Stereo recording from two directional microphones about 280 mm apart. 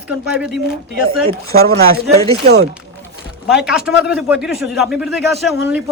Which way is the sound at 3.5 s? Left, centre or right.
Centre.